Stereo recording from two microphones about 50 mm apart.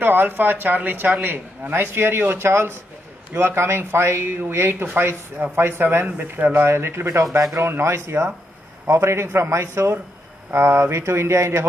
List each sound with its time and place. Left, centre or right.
0.0 s a man's voice: right
6.0 s speech: right
6.6 s a man's voice: right